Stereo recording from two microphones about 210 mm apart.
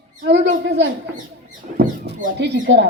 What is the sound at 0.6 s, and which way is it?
Speech, 55° right (ahead or behind).